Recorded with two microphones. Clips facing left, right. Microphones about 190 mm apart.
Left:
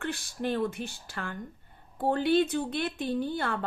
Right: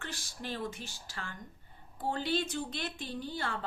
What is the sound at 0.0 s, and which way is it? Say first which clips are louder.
A woman's voice: left 10 dB; 60° left (ahead or behind).